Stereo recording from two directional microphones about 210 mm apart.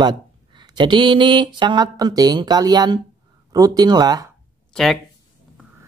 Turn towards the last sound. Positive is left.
turn(degrees=0)  # may be behind; listen again after turning